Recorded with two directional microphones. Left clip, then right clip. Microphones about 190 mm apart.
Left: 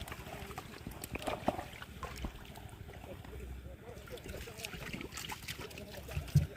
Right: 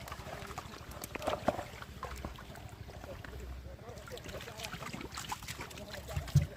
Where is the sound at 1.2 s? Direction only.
Centre (ahead or behind).